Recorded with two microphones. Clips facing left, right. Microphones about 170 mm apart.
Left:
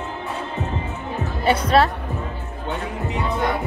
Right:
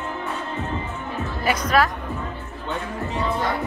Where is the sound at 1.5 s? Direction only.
30° left (ahead or behind).